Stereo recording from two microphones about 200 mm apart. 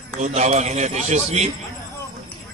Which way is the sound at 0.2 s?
35° right (ahead or behind).